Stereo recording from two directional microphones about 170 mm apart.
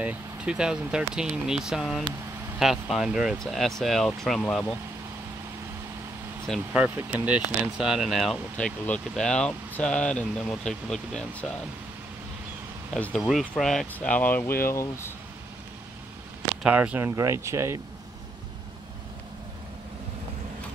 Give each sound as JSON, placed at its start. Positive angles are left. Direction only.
{"t": 0.0, "sound": "speech", "side_deg": -5}
{"t": 6.4, "sound": "speech", "side_deg": 0}
{"t": 6.8, "sound": "speech", "side_deg": -10}
{"t": 12.9, "sound": "speech", "side_deg": 5}
{"t": 16.6, "sound": "speech", "side_deg": -10}